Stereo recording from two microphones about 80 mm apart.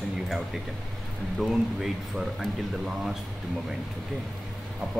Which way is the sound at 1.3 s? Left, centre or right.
Centre.